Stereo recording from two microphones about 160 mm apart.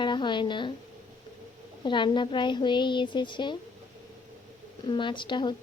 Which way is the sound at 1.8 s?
30° left (ahead or behind).